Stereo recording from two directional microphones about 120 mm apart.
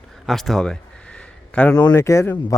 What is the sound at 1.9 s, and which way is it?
Speech, 25° left (ahead or behind).